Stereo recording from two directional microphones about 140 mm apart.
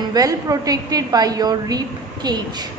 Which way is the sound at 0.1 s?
25° right (ahead or behind).